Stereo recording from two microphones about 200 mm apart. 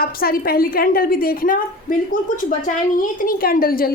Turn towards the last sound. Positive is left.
turn(degrees=50)  # may be behind; listen again after turning